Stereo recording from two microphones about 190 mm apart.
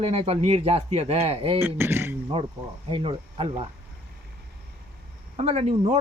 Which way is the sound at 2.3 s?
30° right (ahead or behind).